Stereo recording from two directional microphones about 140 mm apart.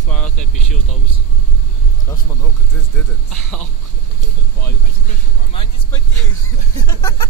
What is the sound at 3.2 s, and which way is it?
Speech, 5° left (ahead or behind).